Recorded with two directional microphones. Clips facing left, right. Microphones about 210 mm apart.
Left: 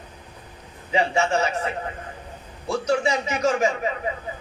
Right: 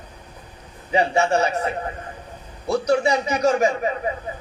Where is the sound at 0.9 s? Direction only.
35° right (ahead or behind).